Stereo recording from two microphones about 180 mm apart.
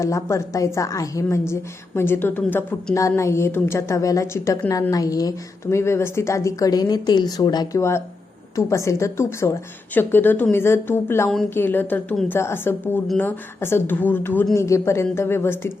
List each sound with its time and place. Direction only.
0.0 s a woman's voice: 15° left (ahead or behind)